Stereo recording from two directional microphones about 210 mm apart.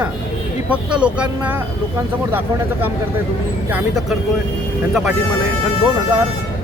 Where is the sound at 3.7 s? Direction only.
5° right (ahead or behind).